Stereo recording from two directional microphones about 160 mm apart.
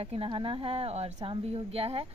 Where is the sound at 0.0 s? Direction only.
35° right (ahead or behind).